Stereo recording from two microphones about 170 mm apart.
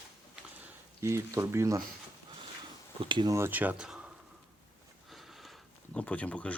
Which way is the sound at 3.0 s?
30° right (ahead or behind).